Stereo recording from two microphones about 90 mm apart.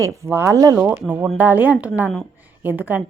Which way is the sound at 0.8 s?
20° right (ahead or behind).